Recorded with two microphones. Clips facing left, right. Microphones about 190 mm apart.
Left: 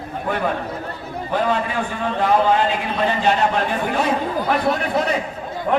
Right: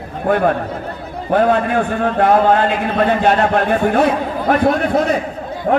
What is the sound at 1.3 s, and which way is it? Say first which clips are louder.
A man's voice: right 7 dB; 55° right (ahead or behind).